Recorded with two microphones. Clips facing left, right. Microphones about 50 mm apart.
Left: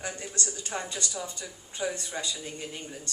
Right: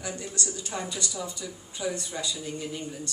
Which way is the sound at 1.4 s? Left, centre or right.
Centre.